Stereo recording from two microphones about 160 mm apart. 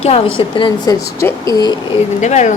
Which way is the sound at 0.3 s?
30° left (ahead or behind).